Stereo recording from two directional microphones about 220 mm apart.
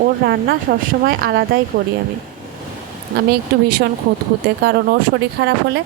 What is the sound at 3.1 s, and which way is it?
Speech, 45° right (ahead or behind).